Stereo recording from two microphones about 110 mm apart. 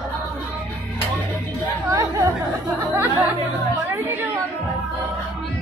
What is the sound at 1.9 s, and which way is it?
Chatter, 30° right (ahead or behind).